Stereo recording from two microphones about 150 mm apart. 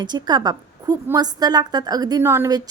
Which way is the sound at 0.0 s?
30° right (ahead or behind).